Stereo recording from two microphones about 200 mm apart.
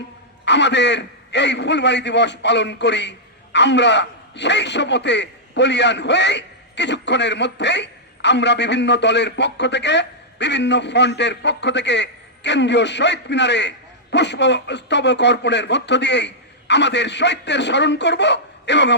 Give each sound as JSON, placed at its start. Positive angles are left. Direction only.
{"t": 0.4, "sound": "a man's voice", "side_deg": 60}